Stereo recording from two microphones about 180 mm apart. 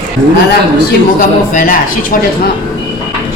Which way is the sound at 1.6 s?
50° left (ahead or behind).